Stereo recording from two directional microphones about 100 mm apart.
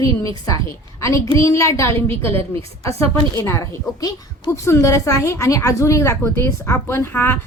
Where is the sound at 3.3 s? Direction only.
35° left (ahead or behind).